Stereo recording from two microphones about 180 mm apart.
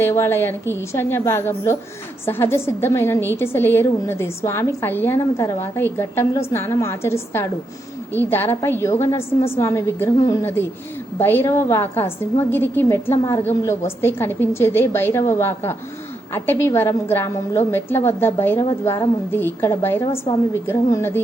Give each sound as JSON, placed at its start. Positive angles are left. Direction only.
{"t": 0.0, "sound": "a woman's voice", "side_deg": 15}